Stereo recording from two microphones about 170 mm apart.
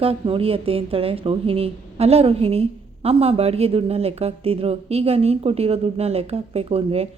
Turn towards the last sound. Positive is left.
turn(degrees=-35)  # may be behind; listen again after turning